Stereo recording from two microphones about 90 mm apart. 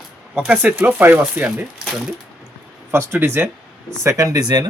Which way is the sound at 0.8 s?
20° right (ahead or behind).